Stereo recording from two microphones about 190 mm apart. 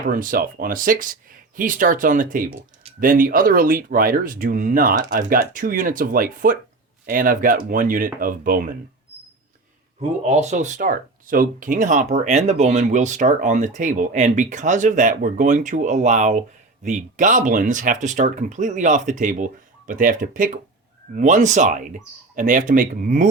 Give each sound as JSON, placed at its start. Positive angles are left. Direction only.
{"t": 0.1, "sound": "speech", "side_deg": -50}
{"t": 10.2, "sound": "speech", "side_deg": -35}